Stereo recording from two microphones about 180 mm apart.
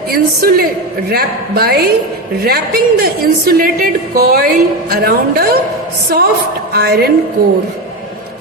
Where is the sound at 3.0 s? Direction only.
55° right (ahead or behind).